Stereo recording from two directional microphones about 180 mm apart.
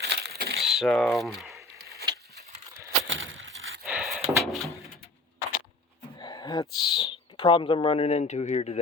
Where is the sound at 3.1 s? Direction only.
90° right.